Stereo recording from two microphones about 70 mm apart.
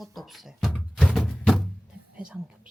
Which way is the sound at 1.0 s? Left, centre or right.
Centre.